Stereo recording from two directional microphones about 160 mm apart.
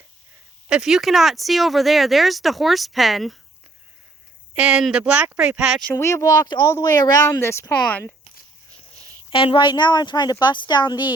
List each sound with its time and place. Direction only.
0.7 s speech: centre (ahead or behind)
4.5 s speech: 5° right (ahead or behind)
5.9 s speech: 20° left (ahead or behind)
9.3 s speech: 35° left (ahead or behind)